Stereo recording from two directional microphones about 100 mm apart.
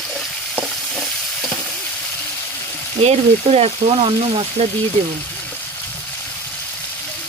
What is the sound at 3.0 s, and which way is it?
Speech, 90° right.